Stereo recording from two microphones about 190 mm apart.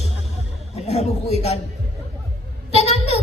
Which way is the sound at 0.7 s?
35° left (ahead or behind).